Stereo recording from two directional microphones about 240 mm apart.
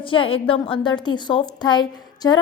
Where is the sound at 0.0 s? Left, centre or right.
Left.